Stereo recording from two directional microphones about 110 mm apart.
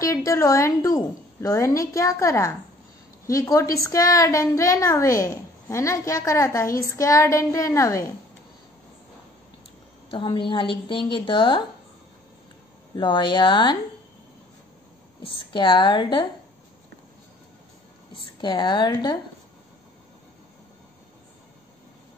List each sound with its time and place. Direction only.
0.0 s a woman's voice: 30° left (ahead or behind)
10.1 s a woman's voice: 45° left (ahead or behind)
12.9 s a woman's voice: 45° left (ahead or behind)
15.2 s a woman's voice: 50° left (ahead or behind)
18.4 s a woman's voice: 45° left (ahead or behind)